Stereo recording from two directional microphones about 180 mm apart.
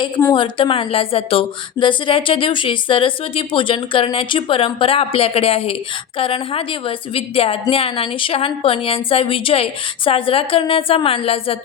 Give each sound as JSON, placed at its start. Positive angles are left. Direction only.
{"t": 0.0, "sound": "a woman's voice", "side_deg": 15}
{"t": 0.3, "sound": "a woman's voice", "side_deg": 30}